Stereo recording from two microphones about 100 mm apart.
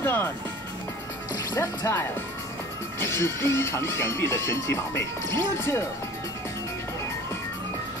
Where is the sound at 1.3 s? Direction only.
35° left (ahead or behind).